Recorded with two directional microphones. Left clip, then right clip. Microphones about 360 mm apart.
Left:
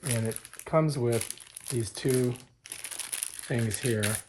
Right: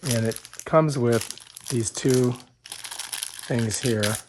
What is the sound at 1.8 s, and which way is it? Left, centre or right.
Crumpling, centre.